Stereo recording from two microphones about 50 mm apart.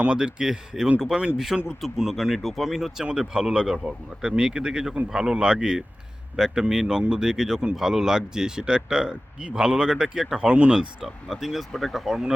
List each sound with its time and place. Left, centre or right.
0.0 s speech: centre
1.8 s speech: centre; by 10.8 s right
11.0 s speech: centre